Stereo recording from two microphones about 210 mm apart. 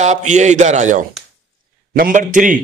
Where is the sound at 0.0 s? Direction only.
35° right (ahead or behind).